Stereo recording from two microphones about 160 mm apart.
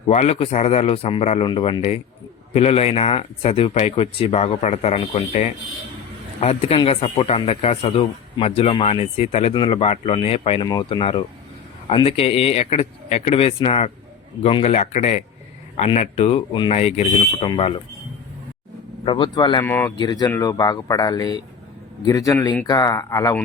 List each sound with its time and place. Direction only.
0.1 s a man's voice: 45° left (ahead or behind)
10.6 s a man's voice: 25° left (ahead or behind); by 17.5 s 40° left (ahead or behind)
19.0 s speech: 30° left (ahead or behind)
19.6 s speech: 10° left (ahead or behind)
20.0 s speech: 25° left (ahead or behind)